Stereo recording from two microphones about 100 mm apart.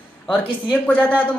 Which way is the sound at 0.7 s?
15° left (ahead or behind).